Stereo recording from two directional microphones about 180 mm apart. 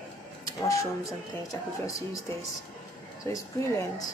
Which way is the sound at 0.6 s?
15° left (ahead or behind).